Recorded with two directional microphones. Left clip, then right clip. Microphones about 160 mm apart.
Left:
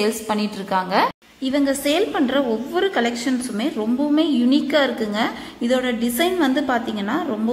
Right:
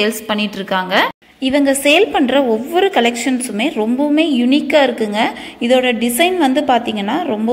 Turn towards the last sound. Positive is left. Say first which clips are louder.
# right 6 dB
turn(degrees=-15)  # may be behind; listen again after turning